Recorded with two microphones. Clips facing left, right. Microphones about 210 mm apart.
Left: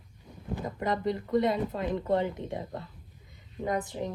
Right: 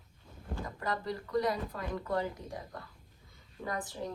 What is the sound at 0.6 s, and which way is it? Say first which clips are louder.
Speech: left 6 dB; 20° left (ahead or behind).